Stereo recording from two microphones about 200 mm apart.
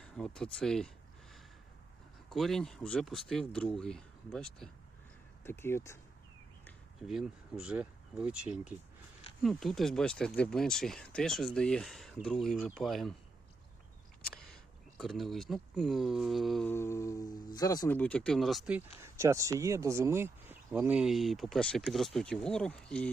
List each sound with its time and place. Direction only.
0.0 s speech: 5° left (ahead or behind)
2.3 s speech: centre (ahead or behind)
7.0 s speech: centre (ahead or behind)
14.3 s speech: 5° left (ahead or behind)
16.7 s a sound: 15° left (ahead or behind)
17.3 s speech: 20° left (ahead or behind)
17.9 s speech: 5° left (ahead or behind)
19.0 s speech: 15° right (ahead or behind); by 23.0 s 5° left (ahead or behind)